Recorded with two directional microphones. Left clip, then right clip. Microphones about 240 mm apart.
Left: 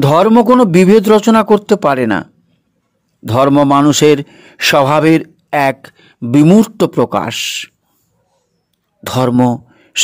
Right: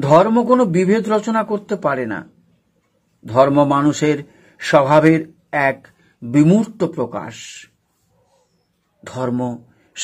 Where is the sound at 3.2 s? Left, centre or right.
Left.